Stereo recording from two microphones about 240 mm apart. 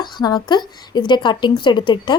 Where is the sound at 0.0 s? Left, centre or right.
Centre.